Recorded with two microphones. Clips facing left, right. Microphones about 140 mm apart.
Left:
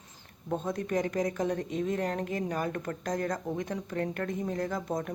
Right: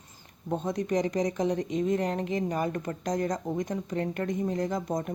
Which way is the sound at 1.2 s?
15° right (ahead or behind).